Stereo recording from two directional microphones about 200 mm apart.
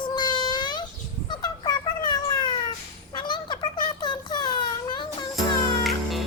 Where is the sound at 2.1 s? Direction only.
20° left (ahead or behind).